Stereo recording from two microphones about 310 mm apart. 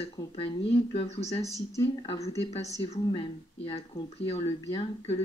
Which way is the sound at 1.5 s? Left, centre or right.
Centre.